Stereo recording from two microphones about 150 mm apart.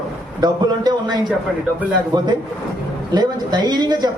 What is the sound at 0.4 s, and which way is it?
A man's voice, 30° right (ahead or behind).